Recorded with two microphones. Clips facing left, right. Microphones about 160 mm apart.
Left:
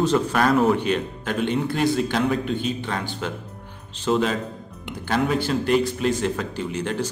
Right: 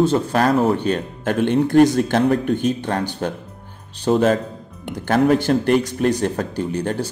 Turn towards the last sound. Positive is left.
turn(degrees=-40)  # may be behind; listen again after turning